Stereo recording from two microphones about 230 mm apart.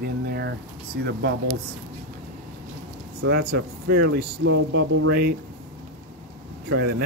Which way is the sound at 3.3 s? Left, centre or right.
Right.